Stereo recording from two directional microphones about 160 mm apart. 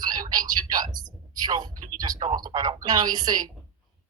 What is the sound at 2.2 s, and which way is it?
Speech, 50° right (ahead or behind).